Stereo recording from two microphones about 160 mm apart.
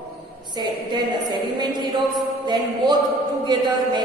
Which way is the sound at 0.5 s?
25° right (ahead or behind).